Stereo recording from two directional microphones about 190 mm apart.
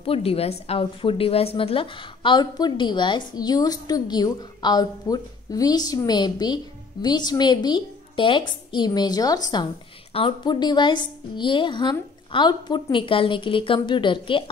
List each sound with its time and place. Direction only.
0.0 s a woman's voice: 30° left (ahead or behind)